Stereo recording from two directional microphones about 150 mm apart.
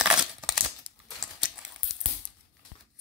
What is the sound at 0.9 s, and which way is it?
Typewriter, 30° right (ahead or behind).